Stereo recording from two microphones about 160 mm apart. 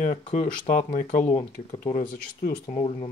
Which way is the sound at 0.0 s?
45° left (ahead or behind).